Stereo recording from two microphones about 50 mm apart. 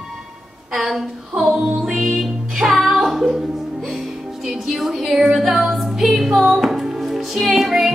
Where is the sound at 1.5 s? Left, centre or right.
Centre.